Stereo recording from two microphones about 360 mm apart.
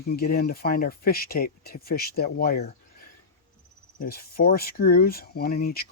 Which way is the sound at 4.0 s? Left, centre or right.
Left.